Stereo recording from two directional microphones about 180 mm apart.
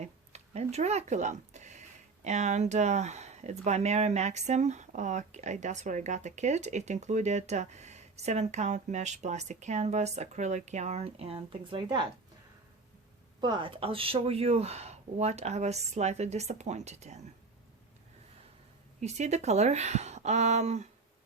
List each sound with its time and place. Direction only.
0.0 s speech: 35° right (ahead or behind)
13.4 s speech: 25° right (ahead or behind)
18.9 s speech: 40° right (ahead or behind)